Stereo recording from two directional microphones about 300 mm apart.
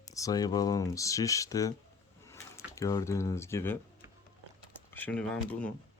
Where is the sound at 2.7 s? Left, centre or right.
Centre.